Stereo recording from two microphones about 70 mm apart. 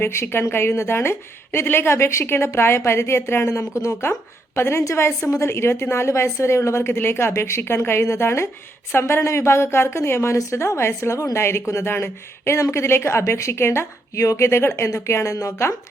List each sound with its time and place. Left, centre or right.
0.0 s a woman's voice: left
6.9 s a woman's voice: left
12.5 s a woman's voice: left